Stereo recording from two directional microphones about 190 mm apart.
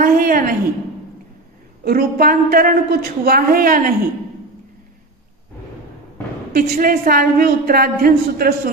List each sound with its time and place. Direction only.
0.0 s a sound: 50° right (ahead or behind)
1.8 s a woman's voice: 50° right (ahead or behind)
6.5 s a woman's voice: 50° right (ahead or behind)